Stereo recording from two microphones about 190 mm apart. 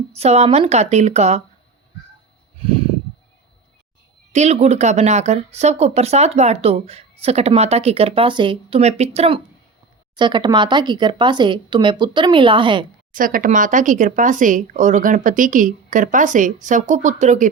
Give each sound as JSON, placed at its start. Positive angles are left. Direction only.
{"t": 0.1, "sound": "speech", "side_deg": -35}
{"t": 2.6, "sound": "a sound", "side_deg": -30}
{"t": 4.3, "sound": "speech", "side_deg": -35}
{"t": 13.1, "sound": "speech", "side_deg": -45}